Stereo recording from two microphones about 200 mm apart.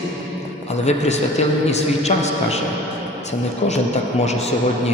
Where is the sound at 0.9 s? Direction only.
35° left (ahead or behind).